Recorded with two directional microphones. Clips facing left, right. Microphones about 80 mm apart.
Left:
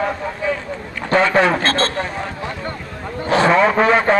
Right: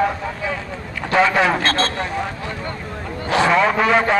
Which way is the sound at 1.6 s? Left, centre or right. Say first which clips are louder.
Left 1 dB; left.